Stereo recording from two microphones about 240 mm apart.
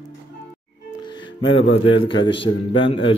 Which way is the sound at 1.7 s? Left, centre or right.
Left.